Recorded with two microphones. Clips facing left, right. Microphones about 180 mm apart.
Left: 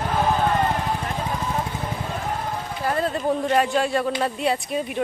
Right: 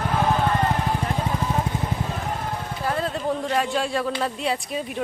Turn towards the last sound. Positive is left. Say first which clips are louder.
# left 2 dB
turn(degrees=0)  # may be behind; listen again after turning